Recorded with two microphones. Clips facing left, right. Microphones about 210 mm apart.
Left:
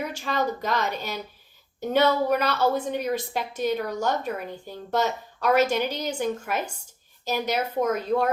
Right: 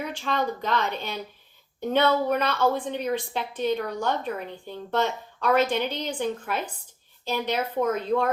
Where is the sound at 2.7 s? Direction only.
10° left (ahead or behind).